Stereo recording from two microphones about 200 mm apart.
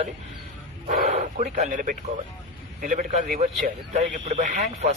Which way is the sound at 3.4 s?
35° right (ahead or behind).